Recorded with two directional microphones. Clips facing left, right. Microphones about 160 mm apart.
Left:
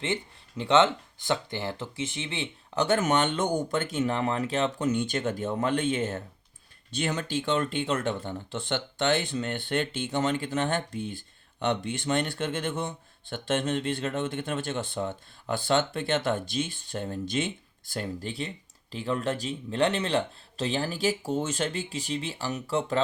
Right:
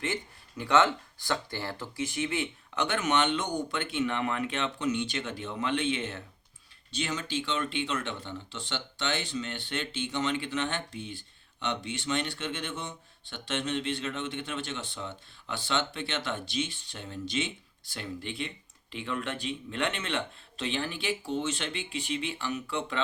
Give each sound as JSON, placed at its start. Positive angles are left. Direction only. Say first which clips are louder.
{"t": 0.0, "sound": "speech", "louder": "left 3 dB", "side_deg": 25}